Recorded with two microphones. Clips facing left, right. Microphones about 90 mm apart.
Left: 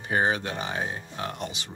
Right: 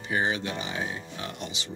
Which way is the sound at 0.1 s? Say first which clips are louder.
Left 3 dB; 45° left (ahead or behind).